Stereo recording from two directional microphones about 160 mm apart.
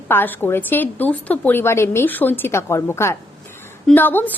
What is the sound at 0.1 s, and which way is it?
A woman's voice, 15° left (ahead or behind).